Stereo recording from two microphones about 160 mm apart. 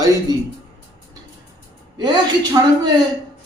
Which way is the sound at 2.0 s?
25° right (ahead or behind).